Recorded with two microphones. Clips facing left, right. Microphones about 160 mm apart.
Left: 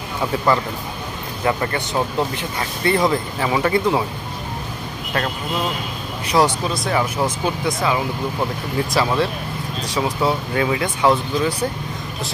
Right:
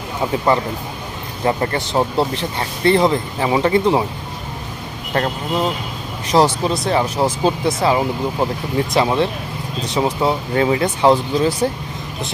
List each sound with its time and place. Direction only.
1.4 s speech: 30° right (ahead or behind)
5.1 s speech: 30° right (ahead or behind)